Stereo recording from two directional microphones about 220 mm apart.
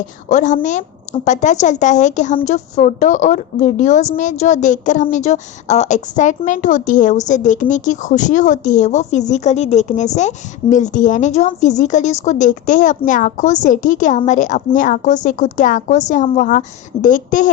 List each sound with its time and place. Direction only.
0.3 s a woman's voice: 35° left (ahead or behind)